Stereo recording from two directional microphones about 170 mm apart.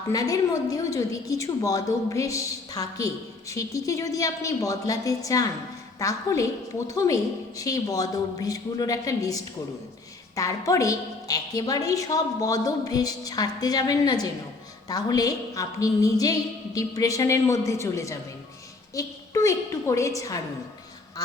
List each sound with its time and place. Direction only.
0.1 s a woman's voice: 20° left (ahead or behind)